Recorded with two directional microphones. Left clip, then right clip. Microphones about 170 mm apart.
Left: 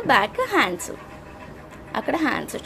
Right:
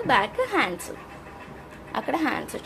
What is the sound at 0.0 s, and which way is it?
Speech, 20° left (ahead or behind).